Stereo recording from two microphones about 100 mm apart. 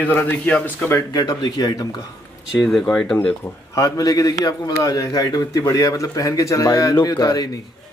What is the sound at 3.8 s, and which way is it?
A man's voice, 35° left (ahead or behind).